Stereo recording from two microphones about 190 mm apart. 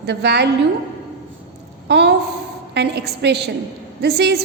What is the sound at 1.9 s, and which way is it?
A woman's voice, 60° right (ahead or behind).